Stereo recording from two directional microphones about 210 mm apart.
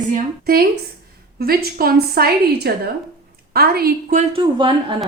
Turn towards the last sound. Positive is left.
turn(degrees=-25)  # may be behind; listen again after turning